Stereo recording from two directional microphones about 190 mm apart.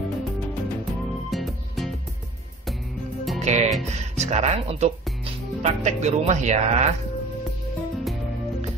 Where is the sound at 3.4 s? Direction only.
35° right (ahead or behind).